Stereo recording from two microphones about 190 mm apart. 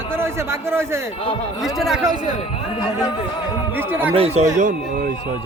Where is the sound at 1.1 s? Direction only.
30° left (ahead or behind).